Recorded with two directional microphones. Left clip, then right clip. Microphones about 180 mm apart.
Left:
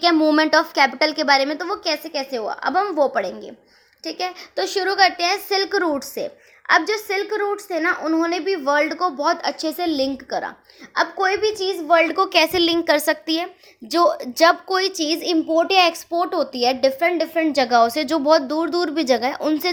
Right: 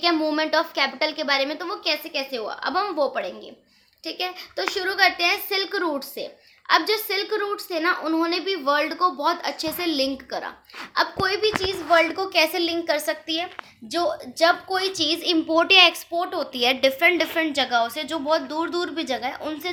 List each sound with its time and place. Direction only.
0.0 s a woman's voice: 45° left (ahead or behind); by 11.8 s 25° left (ahead or behind)
12.0 s a woman's voice: 40° left (ahead or behind)
15.4 s a woman's voice: 25° left (ahead or behind)
15.8 s a woman's voice: 45° left (ahead or behind)
16.5 s a woman's voice: 25° left (ahead or behind)
17.4 s a woman's voice: 45° left (ahead or behind)